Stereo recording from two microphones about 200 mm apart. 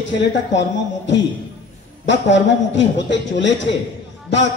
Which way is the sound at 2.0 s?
65° left (ahead or behind).